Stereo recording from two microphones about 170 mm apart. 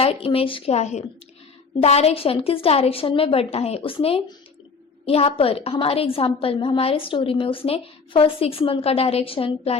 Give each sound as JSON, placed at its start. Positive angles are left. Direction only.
{"t": 0.0, "sound": "a woman's voice", "side_deg": 35}